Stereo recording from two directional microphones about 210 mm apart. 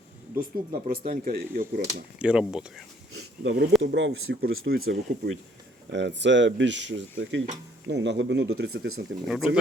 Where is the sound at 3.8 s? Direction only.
60° right (ahead or behind).